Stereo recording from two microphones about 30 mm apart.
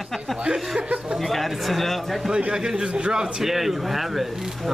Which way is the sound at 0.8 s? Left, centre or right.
Right.